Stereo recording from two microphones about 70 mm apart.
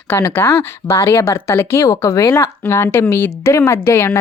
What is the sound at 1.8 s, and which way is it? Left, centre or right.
Speech, left.